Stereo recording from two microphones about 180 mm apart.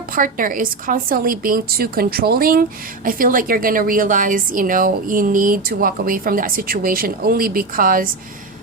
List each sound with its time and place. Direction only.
0.1 s speech: 50° right (ahead or behind)